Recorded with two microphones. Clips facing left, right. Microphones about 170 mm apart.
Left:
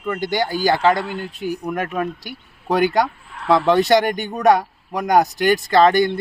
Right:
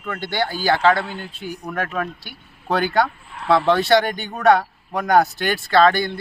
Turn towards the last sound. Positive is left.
turn(degrees=20)  # may be behind; listen again after turning